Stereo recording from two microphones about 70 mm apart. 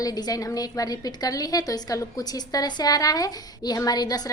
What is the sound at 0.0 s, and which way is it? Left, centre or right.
A woman's voice, left.